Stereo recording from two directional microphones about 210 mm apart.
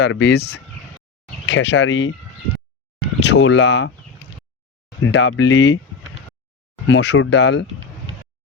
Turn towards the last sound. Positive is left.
turn(degrees=55)  # may be behind; listen again after turning